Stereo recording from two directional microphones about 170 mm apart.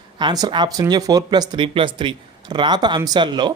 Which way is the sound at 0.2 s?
25° right (ahead or behind).